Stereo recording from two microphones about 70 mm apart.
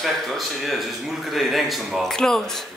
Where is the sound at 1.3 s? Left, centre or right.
Centre.